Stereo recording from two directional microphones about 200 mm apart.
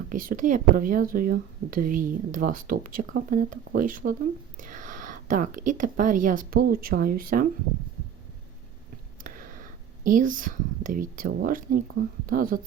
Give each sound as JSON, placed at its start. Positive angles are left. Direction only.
{"t": 0.1, "sound": "speech", "side_deg": -45}
{"t": 9.2, "sound": "speech", "side_deg": -45}